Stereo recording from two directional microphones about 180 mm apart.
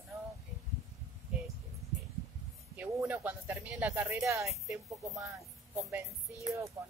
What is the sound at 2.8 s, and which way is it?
Speech, 10° right (ahead or behind).